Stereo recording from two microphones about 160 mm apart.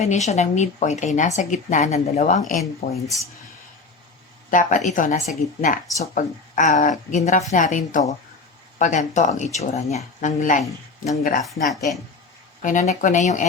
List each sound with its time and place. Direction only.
0.0 s speech: 45° left (ahead or behind)
2.8 s speech: 40° left (ahead or behind)
4.5 s speech: 55° left (ahead or behind)
11.7 s speech: centre (ahead or behind)
12.6 s speech: 50° left (ahead or behind)